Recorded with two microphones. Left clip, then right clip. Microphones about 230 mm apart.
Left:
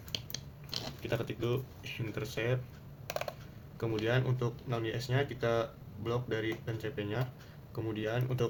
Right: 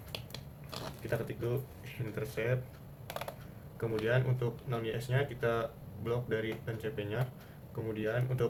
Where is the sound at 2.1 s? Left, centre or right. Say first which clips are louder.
Right 1 dB; left.